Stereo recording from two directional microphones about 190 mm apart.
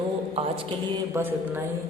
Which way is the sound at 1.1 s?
10° right (ahead or behind).